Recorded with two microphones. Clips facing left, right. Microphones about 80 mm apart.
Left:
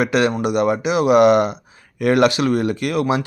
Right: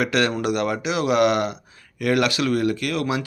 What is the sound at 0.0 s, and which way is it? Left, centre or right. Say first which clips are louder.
Speech: left 4 dB; centre.